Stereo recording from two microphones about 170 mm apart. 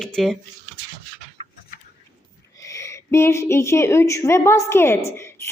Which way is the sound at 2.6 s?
20° left (ahead or behind).